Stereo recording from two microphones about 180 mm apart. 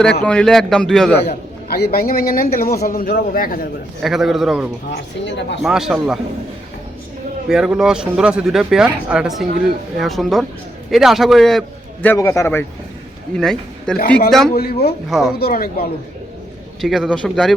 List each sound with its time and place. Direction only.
0.0 s speech: 5° left (ahead or behind)
1.7 s a man's voice: 60° left (ahead or behind)
4.0 s speech: centre (ahead or behind)
7.4 s speech: 5° right (ahead or behind)
12.0 s a man's voice: 15° left (ahead or behind)
13.3 s speech: 5° left (ahead or behind)
14.5 s a man's voice: 60° left (ahead or behind)
15.1 s speech: centre (ahead or behind)
15.4 s a man's voice: 60° left (ahead or behind)
16.8 s speech: centre (ahead or behind)